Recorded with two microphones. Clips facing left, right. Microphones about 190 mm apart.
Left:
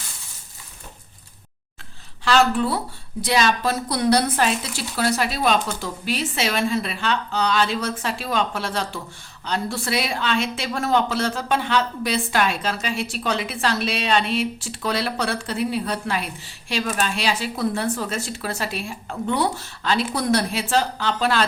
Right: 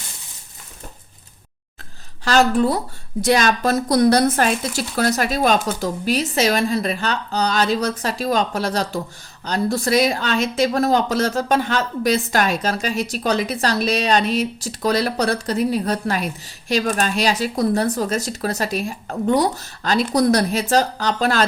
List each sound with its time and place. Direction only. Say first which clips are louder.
2.2 s speech: right 3 dB; 40° right (ahead or behind)